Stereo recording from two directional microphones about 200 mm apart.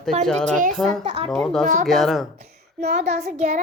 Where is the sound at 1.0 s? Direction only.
25° right (ahead or behind).